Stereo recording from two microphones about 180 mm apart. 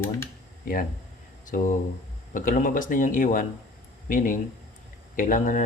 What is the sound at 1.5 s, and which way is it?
Speech, 45° left (ahead or behind).